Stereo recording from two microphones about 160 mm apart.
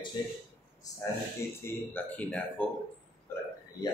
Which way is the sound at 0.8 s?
20° left (ahead or behind).